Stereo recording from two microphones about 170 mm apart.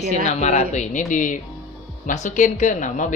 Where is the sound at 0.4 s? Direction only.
40° left (ahead or behind).